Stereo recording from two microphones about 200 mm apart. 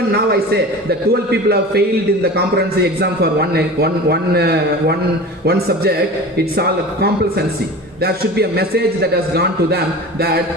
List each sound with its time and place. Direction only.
0.3 s a man's voice: 50° right (ahead or behind)
3.5 s a man's voice: 50° right (ahead or behind)